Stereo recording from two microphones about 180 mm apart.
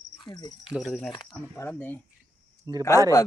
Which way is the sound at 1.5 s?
10° left (ahead or behind).